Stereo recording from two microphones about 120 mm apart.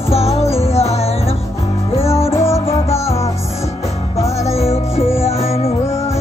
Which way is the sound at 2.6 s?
50° left (ahead or behind).